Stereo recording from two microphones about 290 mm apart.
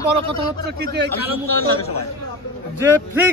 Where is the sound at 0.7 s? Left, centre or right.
Right.